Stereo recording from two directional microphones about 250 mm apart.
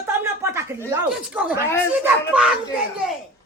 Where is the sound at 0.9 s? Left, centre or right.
Centre.